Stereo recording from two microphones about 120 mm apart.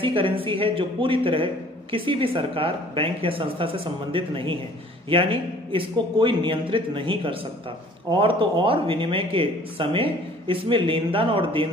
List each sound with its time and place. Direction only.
0.0 s a man's voice: 50° right (ahead or behind)